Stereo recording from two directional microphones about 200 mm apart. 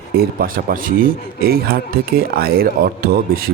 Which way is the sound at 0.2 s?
45° right (ahead or behind).